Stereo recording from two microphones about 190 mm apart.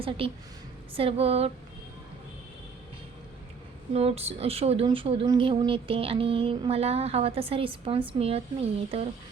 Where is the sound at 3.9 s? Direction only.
35° right (ahead or behind).